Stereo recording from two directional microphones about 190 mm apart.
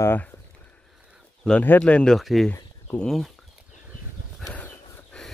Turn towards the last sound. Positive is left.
turn(degrees=10)  # may be behind; listen again after turning